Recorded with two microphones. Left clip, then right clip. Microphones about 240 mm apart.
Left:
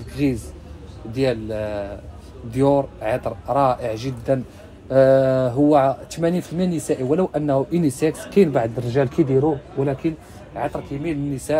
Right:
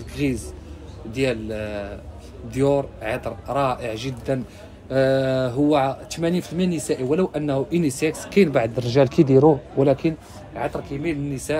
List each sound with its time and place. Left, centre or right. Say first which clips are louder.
0.1 s a man's voice: left 2 dB; centre
8.7 s a man's voice: right 2 dB; centre
10.5 s speech: left 1 dB; centre